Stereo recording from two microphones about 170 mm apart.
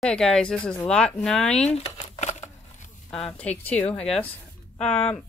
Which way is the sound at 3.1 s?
5° left (ahead or behind).